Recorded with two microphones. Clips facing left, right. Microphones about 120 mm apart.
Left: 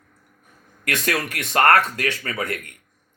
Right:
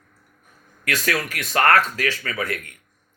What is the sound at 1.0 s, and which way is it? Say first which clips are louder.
Speech: left 1 dB; 25° left (ahead or behind).